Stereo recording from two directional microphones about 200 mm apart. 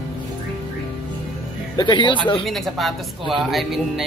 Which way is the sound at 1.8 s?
25° left (ahead or behind).